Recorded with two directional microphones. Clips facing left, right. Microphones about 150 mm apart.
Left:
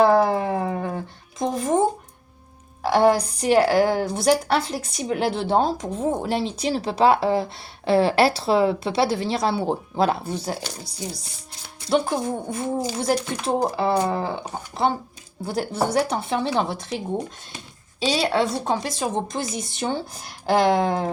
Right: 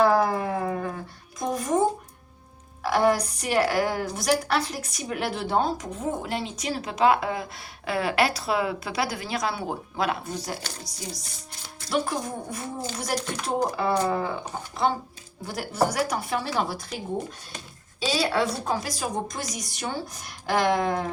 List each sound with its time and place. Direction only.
0.0 s a sound: 30° left (ahead or behind)
2.8 s a woman's voice: 30° left (ahead or behind)
11.9 s a woman's voice: 30° left (ahead or behind)
15.4 s a woman's voice: 30° left (ahead or behind)
18.1 s a woman's voice: 25° left (ahead or behind)